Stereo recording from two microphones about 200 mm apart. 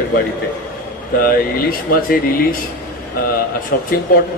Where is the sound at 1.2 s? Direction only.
45° left (ahead or behind).